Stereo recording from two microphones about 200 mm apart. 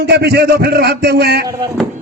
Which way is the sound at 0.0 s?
55° right (ahead or behind).